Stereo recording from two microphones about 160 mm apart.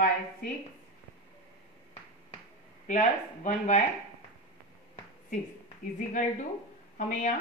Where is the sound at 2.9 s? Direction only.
50° left (ahead or behind).